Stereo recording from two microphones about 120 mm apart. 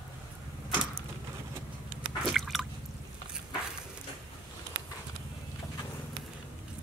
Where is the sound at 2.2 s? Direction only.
Centre (ahead or behind).